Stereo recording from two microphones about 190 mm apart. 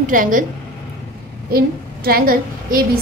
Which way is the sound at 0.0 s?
45° right (ahead or behind).